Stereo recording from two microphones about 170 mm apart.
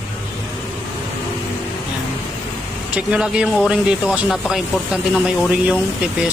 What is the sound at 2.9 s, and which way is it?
Speech, 5° right (ahead or behind).